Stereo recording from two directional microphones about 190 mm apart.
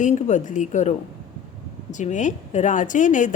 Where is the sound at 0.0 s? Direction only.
40° left (ahead or behind).